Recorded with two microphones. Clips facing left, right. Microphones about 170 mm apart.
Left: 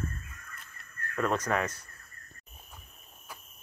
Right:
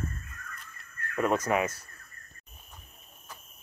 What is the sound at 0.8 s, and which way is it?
Speech, 10° right (ahead or behind).